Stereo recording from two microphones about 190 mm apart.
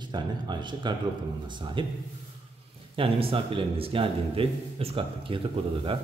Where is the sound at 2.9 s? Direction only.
30° right (ahead or behind).